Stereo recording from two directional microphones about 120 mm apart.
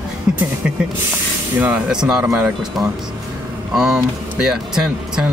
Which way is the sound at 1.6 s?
10° right (ahead or behind).